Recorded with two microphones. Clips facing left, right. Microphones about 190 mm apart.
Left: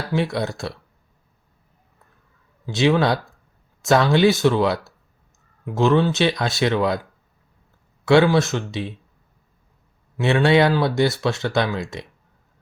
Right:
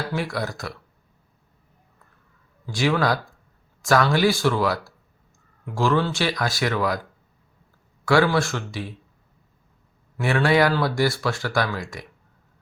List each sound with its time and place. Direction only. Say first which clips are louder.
0.1 s speech: left 4 dB; 25° left (ahead or behind)
2.6 s speech: left 4 dB; 20° left (ahead or behind)
8.0 s speech: left 4 dB; 25° left (ahead or behind)
10.2 s speech: left 3 dB; 25° left (ahead or behind)